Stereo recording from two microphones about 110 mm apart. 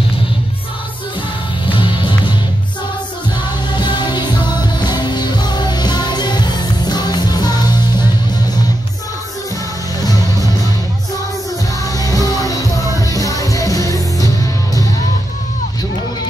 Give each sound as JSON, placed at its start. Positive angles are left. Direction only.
{"t": 1.7, "sound": "music", "side_deg": 50}
{"t": 3.7, "sound": "music", "side_deg": 45}
{"t": 11.8, "sound": "music", "side_deg": 35}